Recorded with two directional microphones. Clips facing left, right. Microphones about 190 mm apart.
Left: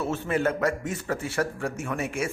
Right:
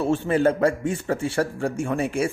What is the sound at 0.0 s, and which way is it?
A man's voice, 30° right (ahead or behind).